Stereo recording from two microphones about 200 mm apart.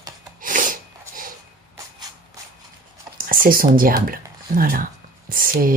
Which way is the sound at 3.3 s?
45° right (ahead or behind).